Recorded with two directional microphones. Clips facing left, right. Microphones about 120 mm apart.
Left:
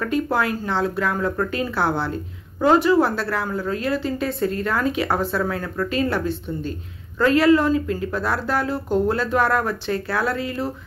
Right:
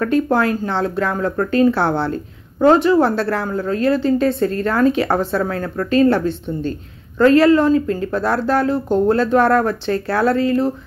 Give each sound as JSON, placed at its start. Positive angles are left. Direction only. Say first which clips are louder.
{"t": 0.0, "sound": "a woman's voice", "louder": "right 5 dB", "side_deg": -35}